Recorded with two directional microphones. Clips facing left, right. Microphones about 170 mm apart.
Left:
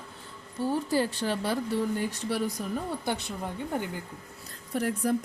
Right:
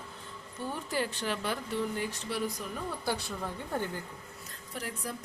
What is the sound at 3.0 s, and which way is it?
Speech, 20° left (ahead or behind).